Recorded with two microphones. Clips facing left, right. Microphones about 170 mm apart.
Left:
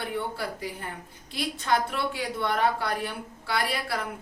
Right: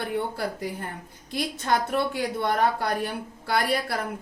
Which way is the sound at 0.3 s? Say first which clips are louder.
Right 3 dB; 50° right (ahead or behind).